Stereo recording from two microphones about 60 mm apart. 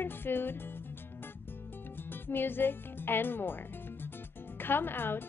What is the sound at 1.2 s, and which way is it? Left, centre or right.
Music, left.